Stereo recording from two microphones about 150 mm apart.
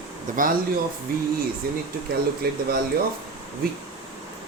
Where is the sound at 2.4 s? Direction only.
90° right.